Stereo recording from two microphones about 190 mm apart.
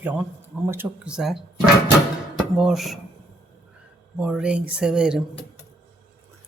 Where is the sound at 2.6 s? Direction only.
Centre (ahead or behind).